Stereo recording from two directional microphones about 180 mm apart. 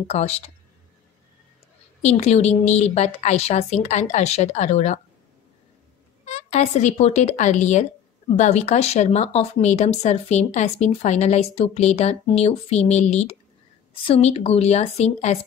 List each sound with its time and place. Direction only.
0.1 s speech: 35° left (ahead or behind)
2.0 s speech: 40° left (ahead or behind)
6.2 s speech: 40° left (ahead or behind)